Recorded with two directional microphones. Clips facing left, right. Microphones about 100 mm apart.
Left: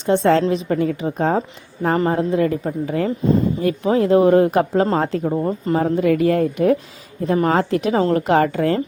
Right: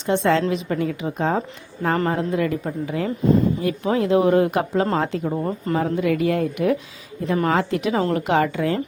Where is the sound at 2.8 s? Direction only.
45° left (ahead or behind).